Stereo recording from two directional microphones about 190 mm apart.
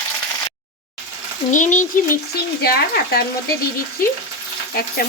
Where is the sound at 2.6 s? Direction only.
55° left (ahead or behind).